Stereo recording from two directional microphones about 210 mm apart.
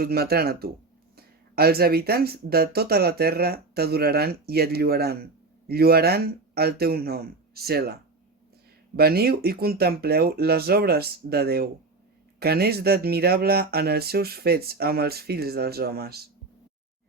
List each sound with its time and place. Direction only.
0.0 s speech: 50° right (ahead or behind)
9.0 s speech: 50° right (ahead or behind)